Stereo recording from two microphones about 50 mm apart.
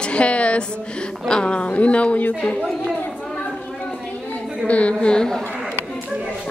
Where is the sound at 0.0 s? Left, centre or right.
Left.